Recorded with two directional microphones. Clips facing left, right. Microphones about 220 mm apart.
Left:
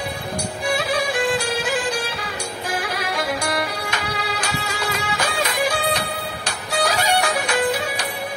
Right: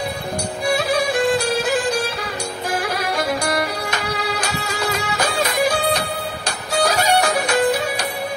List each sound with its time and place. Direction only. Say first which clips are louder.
0.7 s music: right 3 dB; 40° right (ahead or behind)
3.4 s music: right 3 dB; 40° right (ahead or behind)